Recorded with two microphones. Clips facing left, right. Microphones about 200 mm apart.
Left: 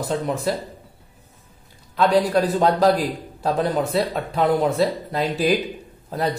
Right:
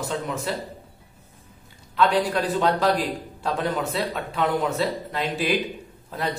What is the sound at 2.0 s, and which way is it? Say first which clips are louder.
A man's voice: left 4 dB; 40° left (ahead or behind).